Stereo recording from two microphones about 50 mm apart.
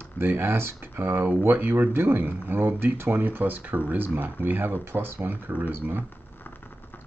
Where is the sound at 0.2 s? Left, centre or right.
Right.